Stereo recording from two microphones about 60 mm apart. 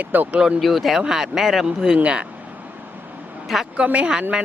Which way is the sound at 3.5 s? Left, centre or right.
Centre.